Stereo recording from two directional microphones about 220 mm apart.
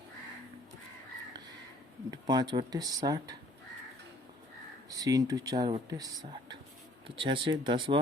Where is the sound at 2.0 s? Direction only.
15° right (ahead or behind).